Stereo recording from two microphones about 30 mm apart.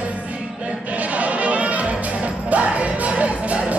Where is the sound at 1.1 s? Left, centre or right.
Right.